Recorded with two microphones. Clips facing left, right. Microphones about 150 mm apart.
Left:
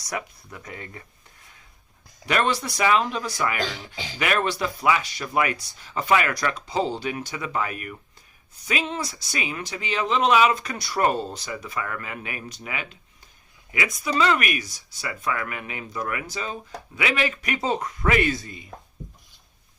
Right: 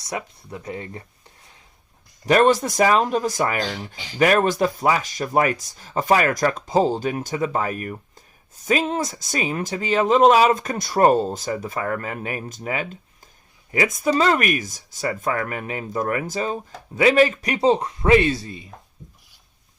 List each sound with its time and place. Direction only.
0.1 s speech: 25° right (ahead or behind)
2.2 s speech: 40° right (ahead or behind)